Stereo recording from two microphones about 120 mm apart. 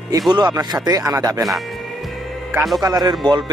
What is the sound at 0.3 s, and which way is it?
Speech, 35° right (ahead or behind).